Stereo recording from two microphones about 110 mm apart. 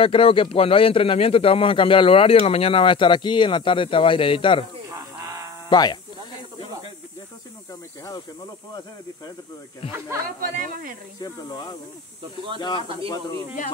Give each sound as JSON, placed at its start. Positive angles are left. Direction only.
{"t": 0.0, "sound": "speech", "side_deg": 55}
{"t": 4.8, "sound": "a sound", "side_deg": -30}
{"t": 5.7, "sound": "speech", "side_deg": 40}
{"t": 11.1, "sound": "speech", "side_deg": 40}
{"t": 12.8, "sound": "speech", "side_deg": -55}